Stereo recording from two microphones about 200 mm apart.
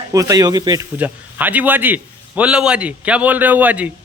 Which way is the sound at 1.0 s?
10° right (ahead or behind).